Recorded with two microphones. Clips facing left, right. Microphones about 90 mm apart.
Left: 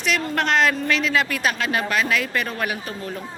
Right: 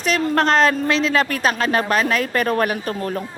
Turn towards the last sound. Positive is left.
turn(degrees=-50)  # may be behind; listen again after turning